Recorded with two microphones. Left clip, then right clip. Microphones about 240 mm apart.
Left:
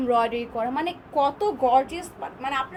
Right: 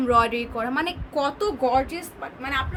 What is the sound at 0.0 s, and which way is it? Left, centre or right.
A woman's voice, right.